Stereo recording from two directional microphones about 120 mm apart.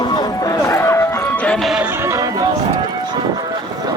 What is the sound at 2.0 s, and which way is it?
Music, 25° right (ahead or behind).